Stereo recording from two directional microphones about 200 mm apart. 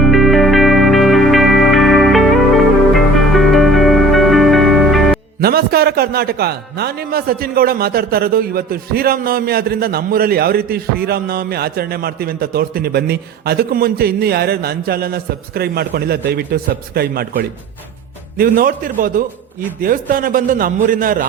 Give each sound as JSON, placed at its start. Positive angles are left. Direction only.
{"t": 0.0, "sound": "music", "side_deg": 0}
{"t": 5.4, "sound": "a man's voice", "side_deg": -50}